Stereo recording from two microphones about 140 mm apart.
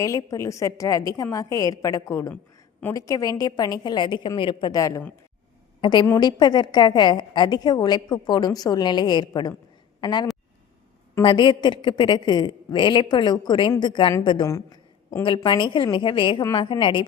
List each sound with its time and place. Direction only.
0.0 s a woman's voice: 25° left (ahead or behind)
5.8 s a woman's voice: 35° left (ahead or behind)